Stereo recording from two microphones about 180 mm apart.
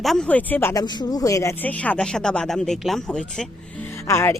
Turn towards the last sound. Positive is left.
turn(degrees=15)  # may be behind; listen again after turning